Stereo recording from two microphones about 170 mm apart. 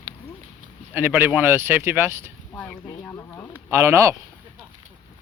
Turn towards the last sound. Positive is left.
turn(degrees=-15)  # may be behind; listen again after turning